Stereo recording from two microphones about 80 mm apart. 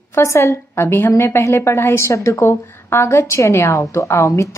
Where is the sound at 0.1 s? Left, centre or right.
Left.